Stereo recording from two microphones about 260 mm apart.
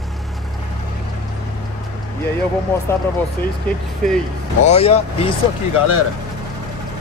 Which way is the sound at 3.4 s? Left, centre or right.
Centre.